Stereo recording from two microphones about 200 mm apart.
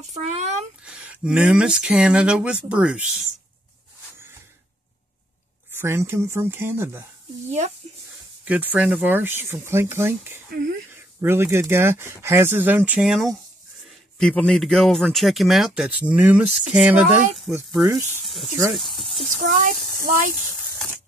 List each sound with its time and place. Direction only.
0.1 s speech: 35° right (ahead or behind)
0.8 s speech: 5° right (ahead or behind)
5.8 s speech: 10° right (ahead or behind)
8.5 s speech: 10° right (ahead or behind)
19.6 s speech: 45° right (ahead or behind)